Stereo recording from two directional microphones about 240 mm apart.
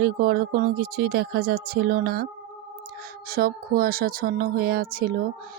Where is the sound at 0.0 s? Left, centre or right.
Right.